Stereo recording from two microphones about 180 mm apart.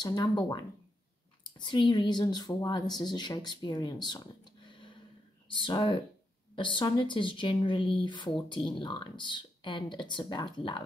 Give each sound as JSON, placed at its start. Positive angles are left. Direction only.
{"t": 0.0, "sound": "speech", "side_deg": 25}